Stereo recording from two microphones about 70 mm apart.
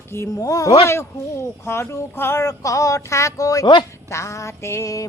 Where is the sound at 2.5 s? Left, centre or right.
Left.